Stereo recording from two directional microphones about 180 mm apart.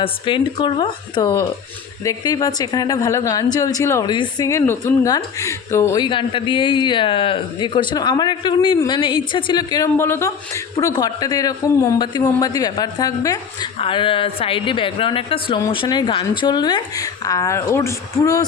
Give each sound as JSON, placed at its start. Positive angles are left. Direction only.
{"t": 0.0, "sound": "a woman's voice", "side_deg": 25}